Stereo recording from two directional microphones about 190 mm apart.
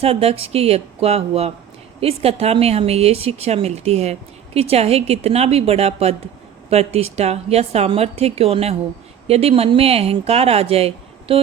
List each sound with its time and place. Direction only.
0.0 s a woman's voice: 30° right (ahead or behind)